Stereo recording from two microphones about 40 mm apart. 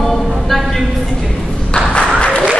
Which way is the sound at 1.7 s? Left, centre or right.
Left.